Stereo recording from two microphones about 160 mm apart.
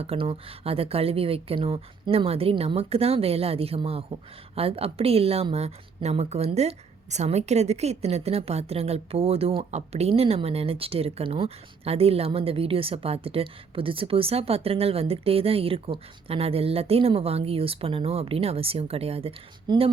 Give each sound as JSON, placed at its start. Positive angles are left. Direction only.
{"t": 0.0, "sound": "speech", "side_deg": -35}